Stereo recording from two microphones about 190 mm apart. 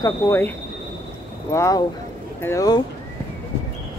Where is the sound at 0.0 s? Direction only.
15° left (ahead or behind).